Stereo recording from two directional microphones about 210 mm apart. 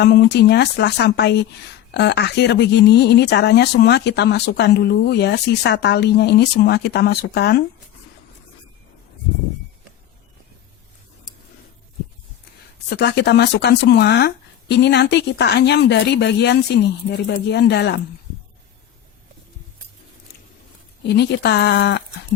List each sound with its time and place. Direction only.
0.0 s speech: 50° left (ahead or behind)
12.9 s speech: 50° left (ahead or behind)
21.1 s speech: 55° left (ahead or behind)